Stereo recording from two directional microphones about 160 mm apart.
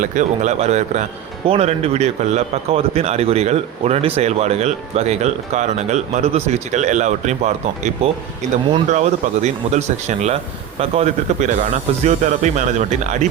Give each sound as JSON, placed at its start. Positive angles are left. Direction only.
{"t": 0.0, "sound": "a man's voice", "side_deg": -50}